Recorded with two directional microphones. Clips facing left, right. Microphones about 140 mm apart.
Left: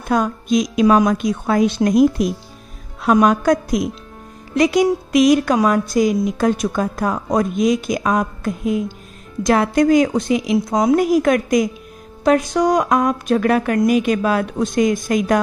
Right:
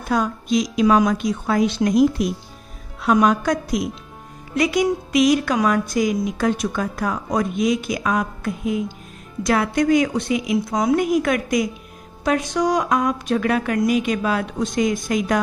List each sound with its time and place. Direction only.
0.1 s a woman's voice: 50° left (ahead or behind)